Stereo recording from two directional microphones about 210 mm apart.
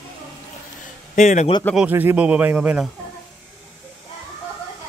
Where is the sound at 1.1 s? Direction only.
35° left (ahead or behind).